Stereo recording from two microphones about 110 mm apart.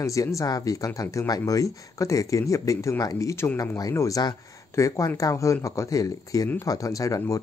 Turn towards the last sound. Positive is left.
turn(degrees=30)  # may be behind; listen again after turning